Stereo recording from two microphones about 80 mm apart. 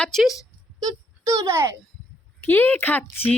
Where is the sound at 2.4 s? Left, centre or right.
Left.